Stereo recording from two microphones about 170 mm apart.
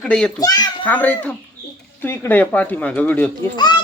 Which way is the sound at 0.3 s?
20° left (ahead or behind).